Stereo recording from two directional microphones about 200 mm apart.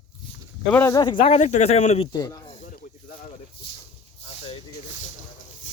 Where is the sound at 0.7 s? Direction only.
10° left (ahead or behind); by 2.0 s 30° left (ahead or behind).